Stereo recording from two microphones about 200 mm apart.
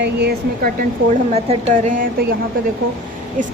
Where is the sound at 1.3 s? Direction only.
35° right (ahead or behind).